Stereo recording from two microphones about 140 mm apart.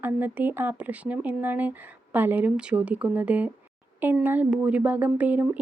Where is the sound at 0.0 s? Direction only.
15° right (ahead or behind).